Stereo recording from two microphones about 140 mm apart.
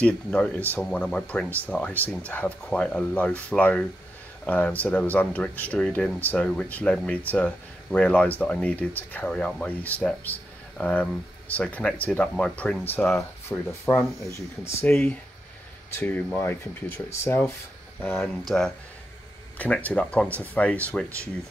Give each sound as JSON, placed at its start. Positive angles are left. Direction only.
{"t": 0.0, "sound": "speech", "side_deg": 10}
{"t": 18.5, "sound": "speech", "side_deg": 0}